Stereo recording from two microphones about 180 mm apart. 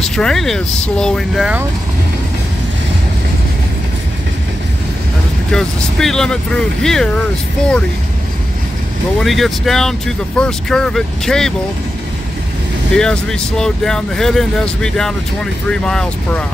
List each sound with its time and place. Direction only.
0.1 s speech: 5° left (ahead or behind)
5.5 s speech: 5° left (ahead or behind)
9.2 s speech: centre (ahead or behind)
12.9 s speech: 5° left (ahead or behind)